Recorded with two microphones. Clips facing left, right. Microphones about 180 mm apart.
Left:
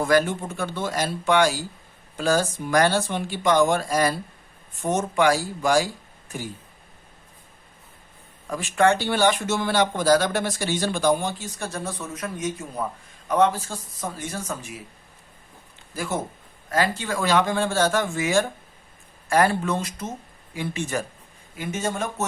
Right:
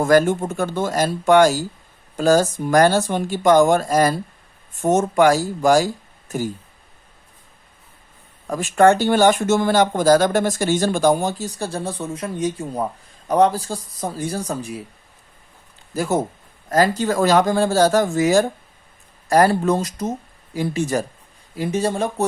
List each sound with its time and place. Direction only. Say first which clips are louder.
0.0 s speech: right 5 dB; 45° right (ahead or behind)
8.4 s speech: right 6 dB; 45° right (ahead or behind)
16.0 s speech: right 7 dB; 40° right (ahead or behind)